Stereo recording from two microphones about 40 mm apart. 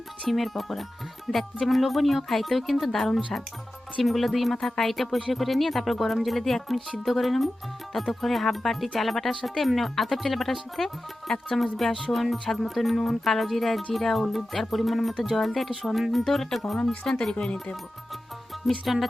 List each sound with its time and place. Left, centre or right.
0.3 s speech: centre
17.3 s speech: left
18.5 s music: centre